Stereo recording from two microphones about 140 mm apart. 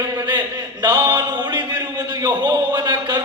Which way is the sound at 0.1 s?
30° right (ahead or behind).